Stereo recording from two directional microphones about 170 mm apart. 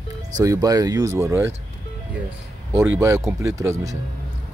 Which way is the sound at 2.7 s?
15° right (ahead or behind).